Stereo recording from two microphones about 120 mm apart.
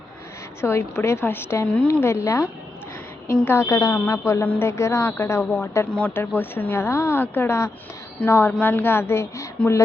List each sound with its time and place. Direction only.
0.6 s a woman's voice: 20° left (ahead or behind)